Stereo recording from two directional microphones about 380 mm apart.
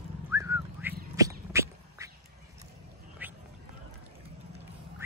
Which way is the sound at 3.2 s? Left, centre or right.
Centre.